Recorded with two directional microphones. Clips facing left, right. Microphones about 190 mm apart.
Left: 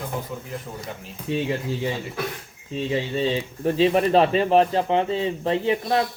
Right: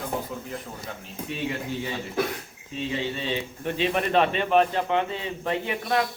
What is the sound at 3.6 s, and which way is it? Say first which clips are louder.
Speech: left 8 dB; 35° left (ahead or behind).